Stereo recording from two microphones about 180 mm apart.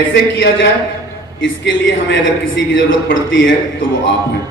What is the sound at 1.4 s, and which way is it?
Speech, 75° left (ahead or behind).